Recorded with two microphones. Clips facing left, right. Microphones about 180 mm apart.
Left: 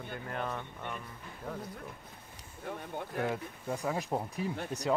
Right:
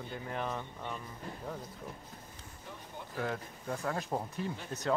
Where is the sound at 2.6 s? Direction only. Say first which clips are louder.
Left 9 dB; 60° left (ahead or behind).